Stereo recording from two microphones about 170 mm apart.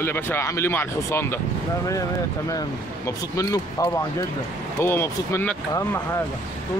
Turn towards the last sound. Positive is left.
turn(degrees=15)  # may be behind; listen again after turning